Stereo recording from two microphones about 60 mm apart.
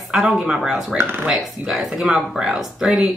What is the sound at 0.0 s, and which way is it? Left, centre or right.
Speech, centre.